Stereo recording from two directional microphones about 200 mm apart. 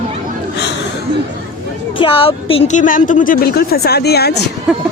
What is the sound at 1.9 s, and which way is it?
A woman's voice, 25° left (ahead or behind).